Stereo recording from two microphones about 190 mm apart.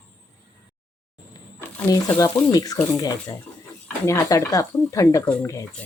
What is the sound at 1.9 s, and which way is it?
A woman's voice, 20° left (ahead or behind).